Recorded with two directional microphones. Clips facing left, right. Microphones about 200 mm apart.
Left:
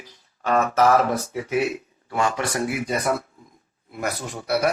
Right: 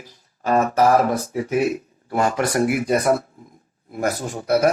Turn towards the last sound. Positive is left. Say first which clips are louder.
# right 5 dB
turn(degrees=-40)  # may be behind; listen again after turning